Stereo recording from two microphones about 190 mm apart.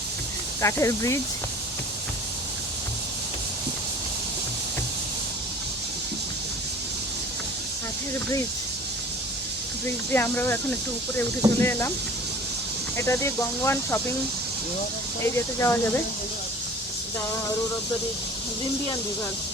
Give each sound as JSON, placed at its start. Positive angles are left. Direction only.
{"t": 0.6, "sound": "speech", "side_deg": 15}
{"t": 10.1, "sound": "speech", "side_deg": 10}
{"t": 13.0, "sound": "speech", "side_deg": 15}
{"t": 15.2, "sound": "speech", "side_deg": 15}